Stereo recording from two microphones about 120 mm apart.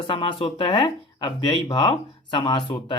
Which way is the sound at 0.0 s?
40° left (ahead or behind).